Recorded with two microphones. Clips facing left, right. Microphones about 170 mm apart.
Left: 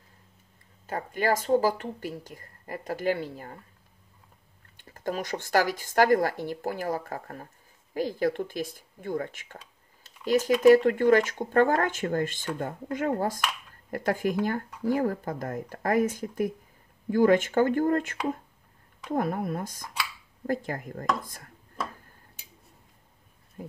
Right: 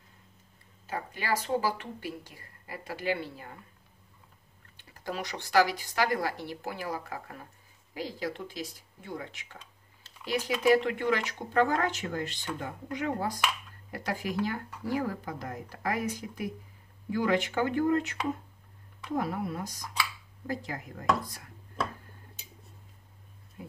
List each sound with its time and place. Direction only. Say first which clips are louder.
0.8 s speech: left 6 dB; 50° left (ahead or behind)
4.7 s speech: left 5 dB; 50° left (ahead or behind)